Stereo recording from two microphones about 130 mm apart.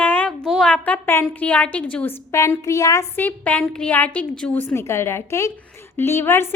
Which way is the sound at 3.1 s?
15° left (ahead or behind).